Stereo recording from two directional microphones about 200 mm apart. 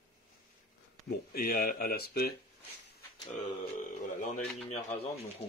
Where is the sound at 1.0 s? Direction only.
50° left (ahead or behind).